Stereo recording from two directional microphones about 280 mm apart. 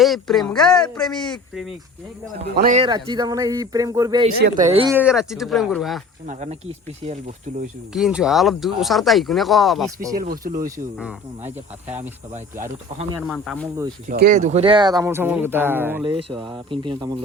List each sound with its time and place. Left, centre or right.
0.0 s speech: centre
2.4 s speech: right
4.9 s speech: centre
6.2 s speech: right
7.9 s speech: centre
10.2 s speech: right
12.9 s speech: right
13.2 s speech: centre
14.1 s speech: right